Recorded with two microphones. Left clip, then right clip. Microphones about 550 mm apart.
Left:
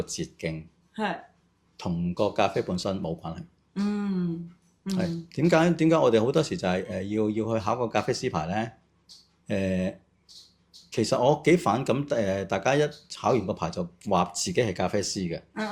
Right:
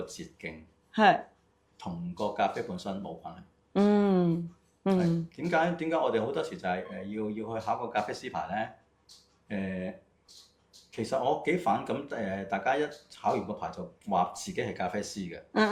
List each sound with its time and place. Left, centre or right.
0.1 s speech: left
0.9 s speech: right
1.7 s speech: left
3.8 s speech: right
5.3 s speech: left
10.9 s speech: left